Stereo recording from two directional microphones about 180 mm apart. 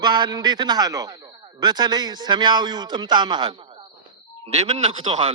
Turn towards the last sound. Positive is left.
turn(degrees=-30)  # may be behind; listen again after turning